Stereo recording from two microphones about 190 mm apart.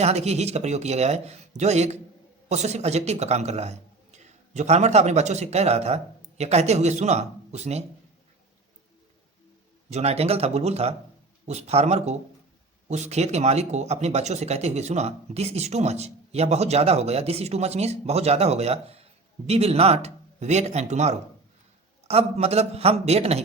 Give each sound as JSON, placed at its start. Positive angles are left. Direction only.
{"t": 0.0, "sound": "a man's voice", "side_deg": -35}
{"t": 9.9, "sound": "speech", "side_deg": -35}